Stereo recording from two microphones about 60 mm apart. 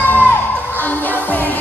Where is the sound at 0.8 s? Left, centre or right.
Left.